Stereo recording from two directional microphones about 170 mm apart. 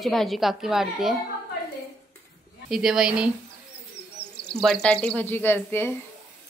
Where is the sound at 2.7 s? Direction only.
Centre (ahead or behind).